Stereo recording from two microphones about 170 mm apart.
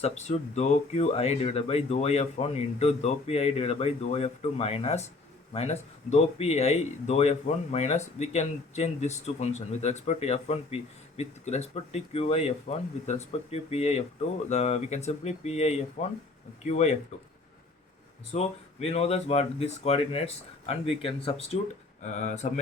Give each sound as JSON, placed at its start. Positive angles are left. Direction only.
{"t": 0.0, "sound": "speech", "side_deg": 40}
{"t": 18.3, "sound": "speech", "side_deg": 40}